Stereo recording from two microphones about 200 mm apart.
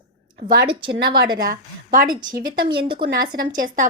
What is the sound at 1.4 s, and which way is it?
Speech, 45° right (ahead or behind).